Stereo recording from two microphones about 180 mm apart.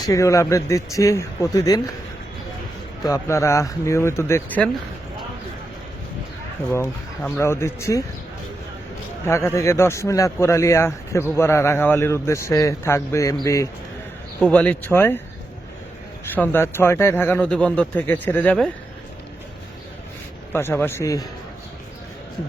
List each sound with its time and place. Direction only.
0.0 s speech: 15° left (ahead or behind)
3.1 s speech: 15° left (ahead or behind)
6.7 s speech: 10° left (ahead or behind)
9.2 s speech: 15° left (ahead or behind)
16.3 s speech: 10° left (ahead or behind)
20.5 s speech: 10° left (ahead or behind)